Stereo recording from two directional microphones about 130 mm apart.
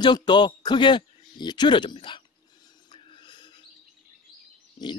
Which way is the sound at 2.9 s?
40° left (ahead or behind).